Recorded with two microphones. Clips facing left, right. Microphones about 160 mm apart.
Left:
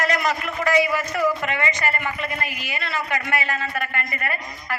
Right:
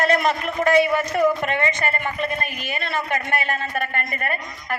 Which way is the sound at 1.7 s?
55° right (ahead or behind).